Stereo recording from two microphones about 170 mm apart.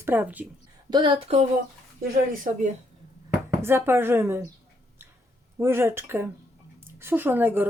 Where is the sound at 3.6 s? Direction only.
15° right (ahead or behind).